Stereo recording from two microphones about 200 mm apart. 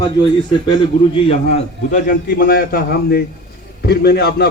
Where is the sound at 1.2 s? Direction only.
35° left (ahead or behind).